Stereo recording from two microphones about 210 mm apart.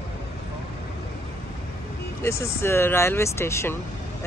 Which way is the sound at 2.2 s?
10° left (ahead or behind).